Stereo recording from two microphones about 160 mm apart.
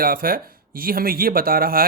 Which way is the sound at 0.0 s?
65° right (ahead or behind).